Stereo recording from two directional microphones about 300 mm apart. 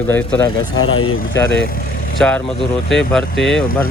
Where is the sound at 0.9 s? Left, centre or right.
Left.